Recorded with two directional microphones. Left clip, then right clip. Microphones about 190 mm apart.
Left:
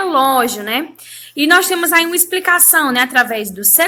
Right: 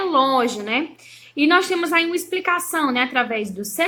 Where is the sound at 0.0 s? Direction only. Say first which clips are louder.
Left 5 dB; 15° left (ahead or behind).